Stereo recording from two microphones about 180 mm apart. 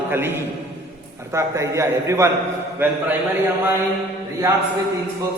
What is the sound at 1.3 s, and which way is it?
Speech, 15° right (ahead or behind).